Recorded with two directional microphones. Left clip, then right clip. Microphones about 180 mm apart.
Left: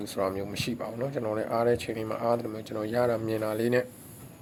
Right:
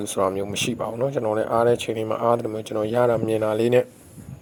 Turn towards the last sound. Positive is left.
turn(degrees=-35)  # may be behind; listen again after turning